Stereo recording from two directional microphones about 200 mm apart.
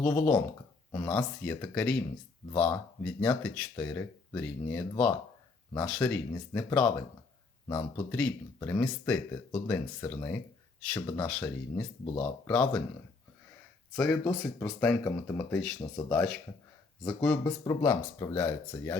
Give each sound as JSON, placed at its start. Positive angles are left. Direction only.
{"t": 0.0, "sound": "speech", "side_deg": 10}
{"t": 8.1, "sound": "speech", "side_deg": 10}
{"t": 13.9, "sound": "speech", "side_deg": 5}